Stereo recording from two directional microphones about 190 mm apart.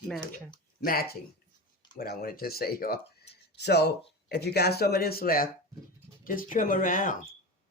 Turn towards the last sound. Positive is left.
turn(degrees=45)  # may be behind; listen again after turning